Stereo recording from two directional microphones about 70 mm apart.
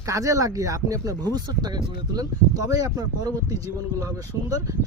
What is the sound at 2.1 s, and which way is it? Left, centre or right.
Speech, right.